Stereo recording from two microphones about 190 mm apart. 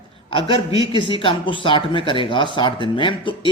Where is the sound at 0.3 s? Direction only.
25° left (ahead or behind).